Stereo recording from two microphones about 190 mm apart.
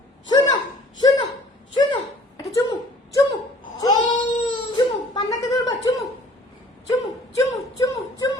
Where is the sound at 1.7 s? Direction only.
25° left (ahead or behind).